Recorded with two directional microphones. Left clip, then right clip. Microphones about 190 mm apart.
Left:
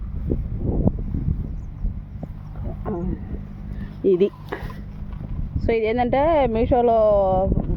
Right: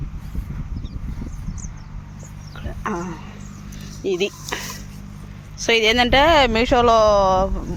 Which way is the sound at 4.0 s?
35° left (ahead or behind).